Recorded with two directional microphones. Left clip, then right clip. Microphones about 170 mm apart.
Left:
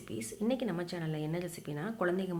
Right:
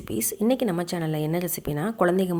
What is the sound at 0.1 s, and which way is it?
Speech, 55° right (ahead or behind).